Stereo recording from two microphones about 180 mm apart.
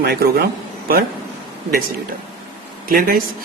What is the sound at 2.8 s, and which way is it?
Speech, 50° right (ahead or behind).